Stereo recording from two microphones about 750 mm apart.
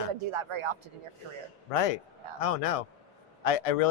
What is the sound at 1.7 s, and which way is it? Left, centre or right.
A man's voice, left.